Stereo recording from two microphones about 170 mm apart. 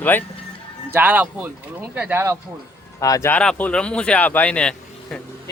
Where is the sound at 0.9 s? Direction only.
10° right (ahead or behind).